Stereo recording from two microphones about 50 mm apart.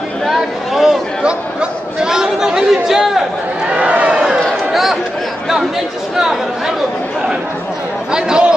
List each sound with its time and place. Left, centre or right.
0.2 s chatter: centre
1.2 s speech: centre
3.6 s a sound: right
6.1 s speech: centre
8.1 s speech: centre